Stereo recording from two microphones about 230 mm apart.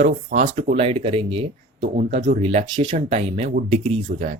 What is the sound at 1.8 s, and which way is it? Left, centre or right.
Speech, right.